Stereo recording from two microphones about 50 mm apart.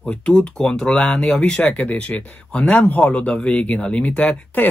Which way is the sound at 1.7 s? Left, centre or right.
Left.